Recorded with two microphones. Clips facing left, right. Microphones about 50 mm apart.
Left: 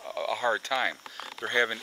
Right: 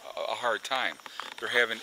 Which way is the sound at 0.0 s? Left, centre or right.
Centre.